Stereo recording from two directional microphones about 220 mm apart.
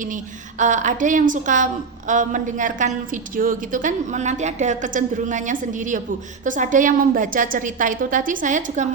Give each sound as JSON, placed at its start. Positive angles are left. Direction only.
{"t": 0.6, "sound": "a woman's voice", "side_deg": -35}